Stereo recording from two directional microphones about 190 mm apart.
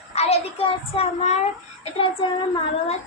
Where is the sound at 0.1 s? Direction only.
35° left (ahead or behind).